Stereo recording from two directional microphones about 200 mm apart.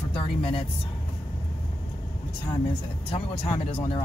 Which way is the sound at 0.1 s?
30° left (ahead or behind).